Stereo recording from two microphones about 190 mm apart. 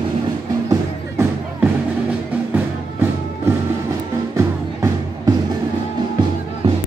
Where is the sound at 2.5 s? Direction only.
10° right (ahead or behind).